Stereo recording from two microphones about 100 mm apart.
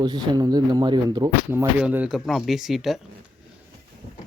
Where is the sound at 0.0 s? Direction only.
40° right (ahead or behind).